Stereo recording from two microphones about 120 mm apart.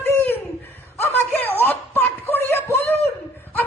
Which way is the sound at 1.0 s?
15° left (ahead or behind).